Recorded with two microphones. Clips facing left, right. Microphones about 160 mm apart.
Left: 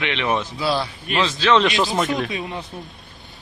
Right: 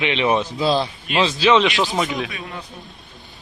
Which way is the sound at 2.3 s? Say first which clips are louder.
Left 5 dB; 25° left (ahead or behind).